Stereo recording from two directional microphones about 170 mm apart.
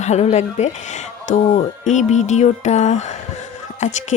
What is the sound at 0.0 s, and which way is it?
A woman's voice, 40° left (ahead or behind).